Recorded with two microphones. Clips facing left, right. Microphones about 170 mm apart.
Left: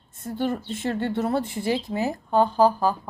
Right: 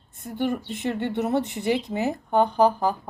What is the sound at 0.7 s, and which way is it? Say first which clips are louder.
Speech: left 1 dB; 15° right (ahead or behind).